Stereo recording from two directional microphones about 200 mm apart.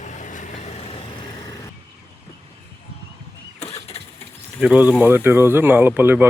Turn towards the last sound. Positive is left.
turn(degrees=-10)  # may be behind; listen again after turning